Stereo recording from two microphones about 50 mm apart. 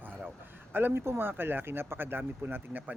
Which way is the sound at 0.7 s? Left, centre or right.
Right.